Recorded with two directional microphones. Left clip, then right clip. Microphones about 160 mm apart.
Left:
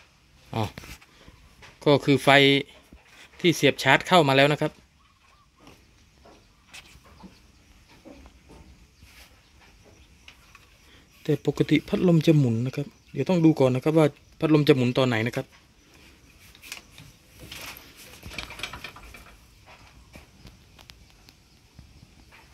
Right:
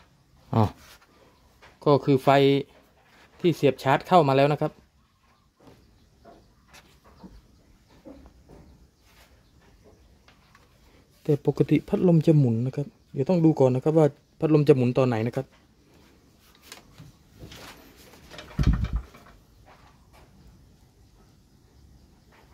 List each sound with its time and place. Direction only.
0.5 s speech: 60° right (ahead or behind)
1.8 s speech: centre (ahead or behind)
11.2 s speech: 15° right (ahead or behind)